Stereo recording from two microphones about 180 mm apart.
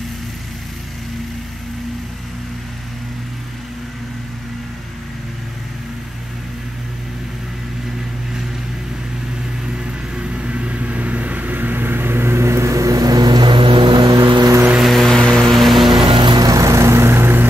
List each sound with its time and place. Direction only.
10.1 s vehicle: 5° right (ahead or behind)
14.8 s vehicle: centre (ahead or behind)
16.1 s vehicle: 25° right (ahead or behind)